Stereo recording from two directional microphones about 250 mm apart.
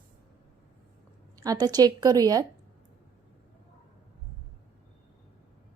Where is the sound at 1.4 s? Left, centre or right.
Centre.